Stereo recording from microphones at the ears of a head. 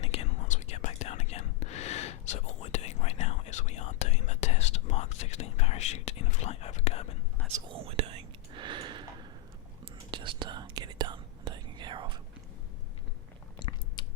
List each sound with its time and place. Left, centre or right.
0.0 s whispering: left
7.4 s whispering: right